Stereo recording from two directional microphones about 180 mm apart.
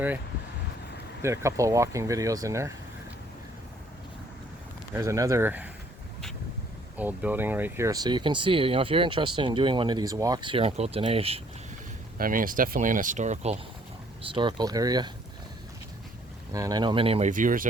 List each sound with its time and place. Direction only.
1.2 s speech: 15° right (ahead or behind)
4.9 s speech: 15° right (ahead or behind)
6.9 s speech: 10° right (ahead or behind); by 11.4 s 35° right (ahead or behind)
12.1 s speech: 50° right (ahead or behind)
14.3 s speech: 25° right (ahead or behind)
16.5 s speech: 20° right (ahead or behind); by 17.7 s 50° right (ahead or behind)